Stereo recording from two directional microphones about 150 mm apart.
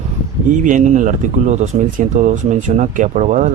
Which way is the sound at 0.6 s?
55° right (ahead or behind).